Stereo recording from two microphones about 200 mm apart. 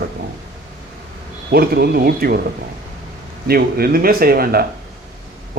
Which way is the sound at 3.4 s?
50° right (ahead or behind).